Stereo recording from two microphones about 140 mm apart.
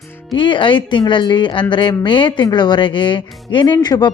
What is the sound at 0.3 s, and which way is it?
Speech, 35° left (ahead or behind).